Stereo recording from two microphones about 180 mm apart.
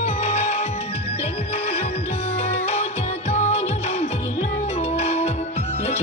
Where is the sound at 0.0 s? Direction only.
35° left (ahead or behind).